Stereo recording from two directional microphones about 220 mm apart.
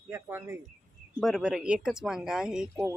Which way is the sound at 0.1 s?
10° right (ahead or behind).